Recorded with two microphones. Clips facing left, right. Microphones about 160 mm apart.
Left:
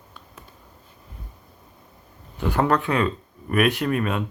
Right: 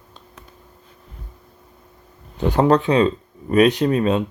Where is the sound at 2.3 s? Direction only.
20° right (ahead or behind).